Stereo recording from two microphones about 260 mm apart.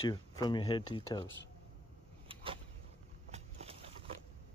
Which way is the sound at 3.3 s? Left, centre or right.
Right.